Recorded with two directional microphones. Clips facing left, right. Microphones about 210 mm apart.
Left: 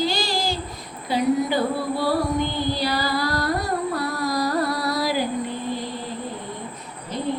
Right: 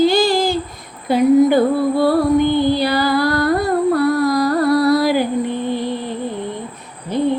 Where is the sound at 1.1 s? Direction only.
55° right (ahead or behind).